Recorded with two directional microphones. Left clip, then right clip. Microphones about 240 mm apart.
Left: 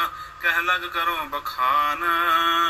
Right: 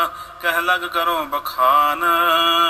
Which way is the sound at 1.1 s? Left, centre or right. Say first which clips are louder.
Right 5 dB; right.